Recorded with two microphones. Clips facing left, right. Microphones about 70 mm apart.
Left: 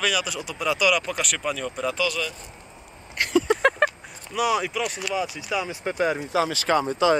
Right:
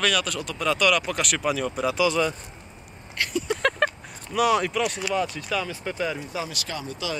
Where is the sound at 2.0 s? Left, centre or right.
Right.